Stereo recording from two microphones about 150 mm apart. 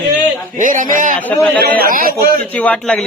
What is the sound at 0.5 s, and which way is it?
Speech, 60° right (ahead or behind).